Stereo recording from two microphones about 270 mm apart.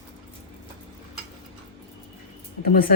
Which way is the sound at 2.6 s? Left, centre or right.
Left.